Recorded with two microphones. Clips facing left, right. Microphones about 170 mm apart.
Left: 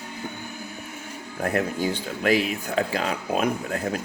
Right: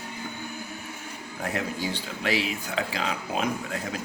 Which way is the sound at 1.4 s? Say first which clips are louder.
Left 6 dB; 50° left (ahead or behind).